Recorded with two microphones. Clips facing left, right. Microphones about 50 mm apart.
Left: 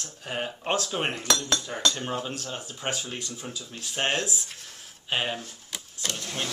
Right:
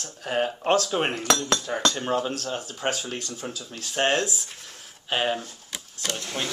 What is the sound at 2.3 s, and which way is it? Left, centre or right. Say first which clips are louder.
Speech: right 5 dB; centre.